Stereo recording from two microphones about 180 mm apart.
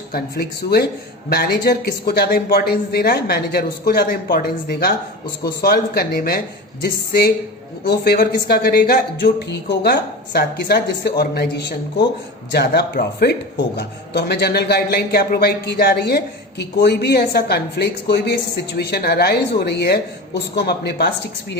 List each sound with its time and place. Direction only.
0.1 s speech: 60° left (ahead or behind)